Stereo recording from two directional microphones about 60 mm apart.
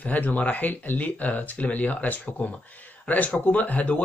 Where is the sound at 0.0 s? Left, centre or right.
Left.